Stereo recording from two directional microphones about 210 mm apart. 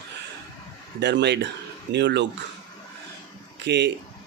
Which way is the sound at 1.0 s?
55° right (ahead or behind).